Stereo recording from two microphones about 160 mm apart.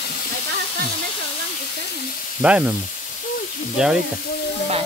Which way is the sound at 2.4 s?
10° right (ahead or behind).